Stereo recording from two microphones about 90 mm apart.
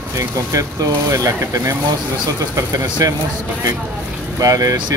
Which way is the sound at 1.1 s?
40° right (ahead or behind).